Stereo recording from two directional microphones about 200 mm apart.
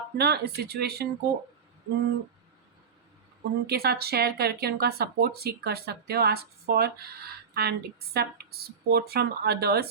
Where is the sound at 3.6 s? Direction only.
55° right (ahead or behind).